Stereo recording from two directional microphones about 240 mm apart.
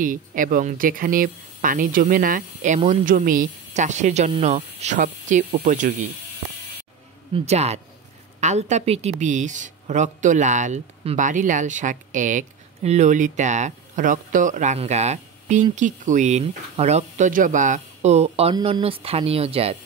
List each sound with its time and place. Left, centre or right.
0.0 s speech: right
7.3 s speech: right